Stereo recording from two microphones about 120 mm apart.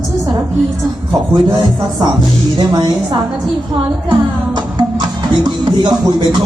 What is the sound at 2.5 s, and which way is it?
Music, 35° right (ahead or behind).